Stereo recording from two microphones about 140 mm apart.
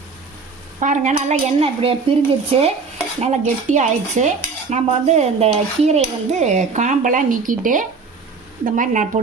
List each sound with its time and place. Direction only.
0.8 s speech: 65° right (ahead or behind); by 2.7 s 45° right (ahead or behind)
3.2 s dishes: 55° right (ahead or behind)